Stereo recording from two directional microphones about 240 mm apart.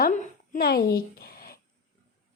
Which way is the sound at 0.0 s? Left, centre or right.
Left.